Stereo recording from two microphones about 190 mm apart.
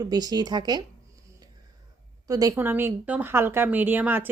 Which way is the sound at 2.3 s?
20° right (ahead or behind).